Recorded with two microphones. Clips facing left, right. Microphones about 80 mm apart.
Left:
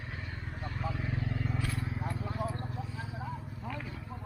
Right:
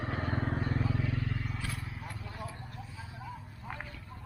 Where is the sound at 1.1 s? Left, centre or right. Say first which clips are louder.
Right 1 dB; left.